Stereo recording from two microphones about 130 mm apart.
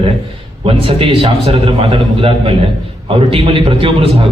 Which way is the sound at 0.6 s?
45° right (ahead or behind).